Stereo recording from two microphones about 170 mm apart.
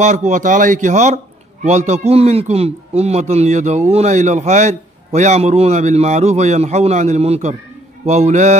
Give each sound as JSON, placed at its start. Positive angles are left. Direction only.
{"t": 0.0, "sound": "a man's voice", "side_deg": -45}